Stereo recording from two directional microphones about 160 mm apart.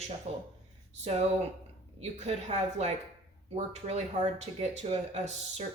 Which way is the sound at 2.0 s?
45° right (ahead or behind).